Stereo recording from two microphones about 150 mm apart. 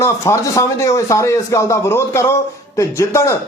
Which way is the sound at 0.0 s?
20° left (ahead or behind).